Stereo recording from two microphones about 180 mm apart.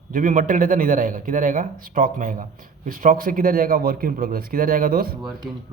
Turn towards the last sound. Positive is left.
turn(degrees=-55)  # may be behind; listen again after turning